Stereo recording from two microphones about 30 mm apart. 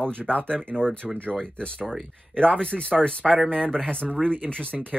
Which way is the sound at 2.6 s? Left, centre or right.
Left.